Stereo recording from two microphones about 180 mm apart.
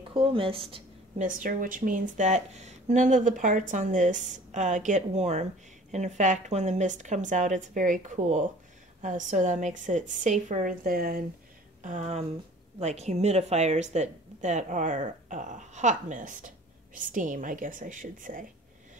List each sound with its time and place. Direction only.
0.1 s speech: 30° right (ahead or behind)
1.2 s speech: 50° right (ahead or behind)
11.8 s speech: 40° right (ahead or behind)